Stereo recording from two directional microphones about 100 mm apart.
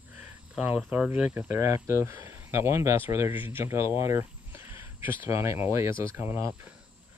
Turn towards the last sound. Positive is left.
turn(degrees=-25)  # may be behind; listen again after turning